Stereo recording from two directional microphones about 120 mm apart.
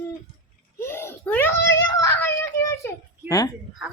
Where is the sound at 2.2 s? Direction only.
20° left (ahead or behind).